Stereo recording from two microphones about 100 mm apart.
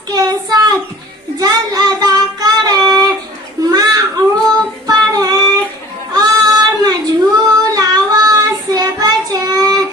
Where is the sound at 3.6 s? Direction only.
40° right (ahead or behind).